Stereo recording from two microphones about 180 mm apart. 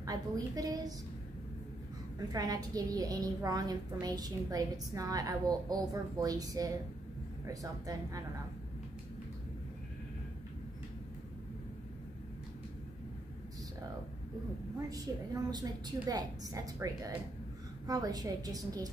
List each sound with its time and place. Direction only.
0.0 s a woman's voice: 20° right (ahead or behind)
2.1 s a woman's voice: 20° right (ahead or behind)
14.9 s a woman's voice: 20° right (ahead or behind)